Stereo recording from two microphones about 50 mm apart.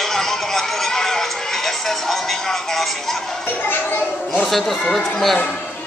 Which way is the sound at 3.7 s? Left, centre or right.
Left.